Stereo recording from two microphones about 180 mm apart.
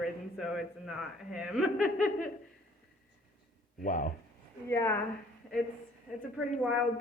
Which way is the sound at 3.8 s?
45° left (ahead or behind).